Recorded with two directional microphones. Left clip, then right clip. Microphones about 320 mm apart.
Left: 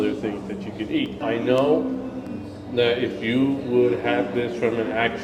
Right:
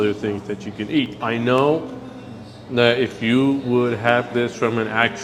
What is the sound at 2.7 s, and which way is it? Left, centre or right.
A man's voice, right.